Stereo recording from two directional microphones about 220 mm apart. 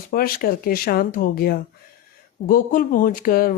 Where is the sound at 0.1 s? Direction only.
40° left (ahead or behind).